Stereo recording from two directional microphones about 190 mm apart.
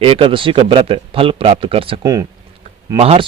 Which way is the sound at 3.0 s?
35° right (ahead or behind).